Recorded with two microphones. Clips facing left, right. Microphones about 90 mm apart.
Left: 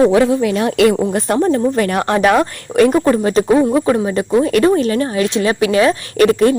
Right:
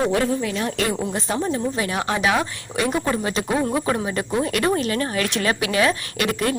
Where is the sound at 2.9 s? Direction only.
40° left (ahead or behind).